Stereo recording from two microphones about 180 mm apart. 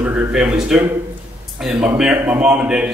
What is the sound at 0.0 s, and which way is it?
Speech, 5° right (ahead or behind).